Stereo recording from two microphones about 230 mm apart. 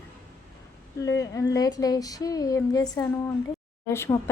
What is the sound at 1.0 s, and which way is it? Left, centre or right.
A woman's voice, centre.